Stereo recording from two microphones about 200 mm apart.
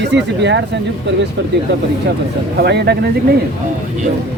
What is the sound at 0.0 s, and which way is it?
Speech, 60° right (ahead or behind).